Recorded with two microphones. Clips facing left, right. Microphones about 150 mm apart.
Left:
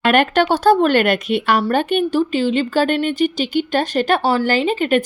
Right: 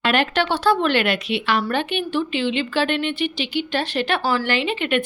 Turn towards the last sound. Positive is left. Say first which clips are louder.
# left 5 dB
turn(degrees=40)  # may be behind; listen again after turning